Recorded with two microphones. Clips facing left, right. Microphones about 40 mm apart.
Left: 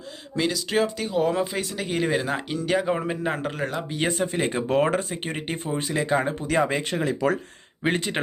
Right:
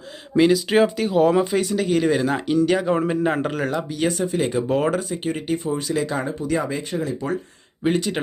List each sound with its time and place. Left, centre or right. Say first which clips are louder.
0.3 s speech: right 7 dB; centre
1.0 s speech: right 6 dB; centre
3.8 s speech: right 3 dB; left
4.9 s speech: right 3 dB; left
7.2 s speech: left 5 dB; left
7.9 s speech: right 4 dB; left